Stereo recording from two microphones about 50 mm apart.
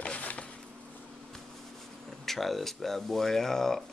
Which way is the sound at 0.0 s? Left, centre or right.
Left.